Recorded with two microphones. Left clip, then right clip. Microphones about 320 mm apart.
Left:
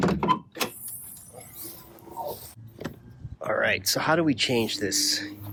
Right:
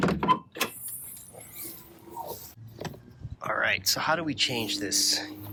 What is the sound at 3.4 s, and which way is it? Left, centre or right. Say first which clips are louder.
Speech: left 2 dB; centre.